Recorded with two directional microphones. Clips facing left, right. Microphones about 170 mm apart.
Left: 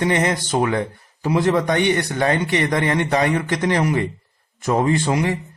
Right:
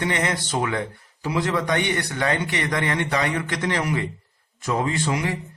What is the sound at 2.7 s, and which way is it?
A man's voice, 30° left (ahead or behind).